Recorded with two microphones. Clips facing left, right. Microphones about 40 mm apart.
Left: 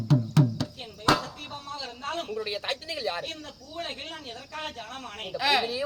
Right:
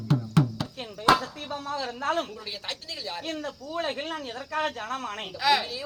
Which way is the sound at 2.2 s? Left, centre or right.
Centre.